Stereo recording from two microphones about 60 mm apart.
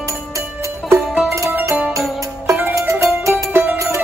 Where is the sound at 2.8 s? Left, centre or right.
Right.